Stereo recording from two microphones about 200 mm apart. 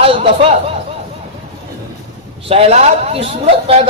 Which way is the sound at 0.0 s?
30° right (ahead or behind).